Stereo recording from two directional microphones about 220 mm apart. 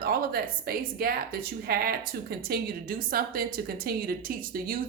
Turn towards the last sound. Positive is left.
turn(degrees=-40)  # may be behind; listen again after turning